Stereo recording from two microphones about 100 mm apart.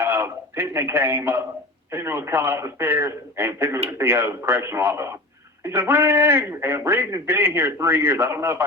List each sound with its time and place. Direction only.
0.0 s a man's voice: 25° right (ahead or behind)